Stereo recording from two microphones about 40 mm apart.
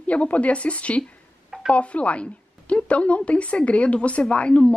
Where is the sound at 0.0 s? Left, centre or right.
Left.